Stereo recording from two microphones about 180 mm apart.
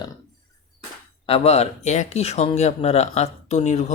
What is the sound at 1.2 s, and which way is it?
Speech, 35° left (ahead or behind).